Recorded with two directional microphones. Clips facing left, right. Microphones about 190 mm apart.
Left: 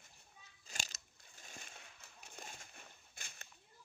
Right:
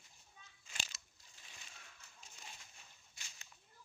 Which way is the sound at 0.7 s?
40° left (ahead or behind).